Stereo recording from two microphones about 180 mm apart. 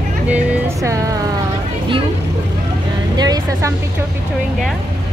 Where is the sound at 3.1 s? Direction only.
20° right (ahead or behind).